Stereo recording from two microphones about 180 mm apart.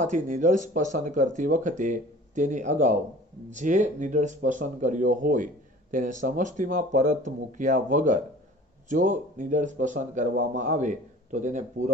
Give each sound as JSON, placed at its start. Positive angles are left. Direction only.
{"t": 0.0, "sound": "speech", "side_deg": -45}